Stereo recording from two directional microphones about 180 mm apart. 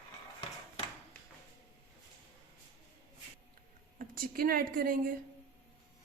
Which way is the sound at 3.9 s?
50° right (ahead or behind).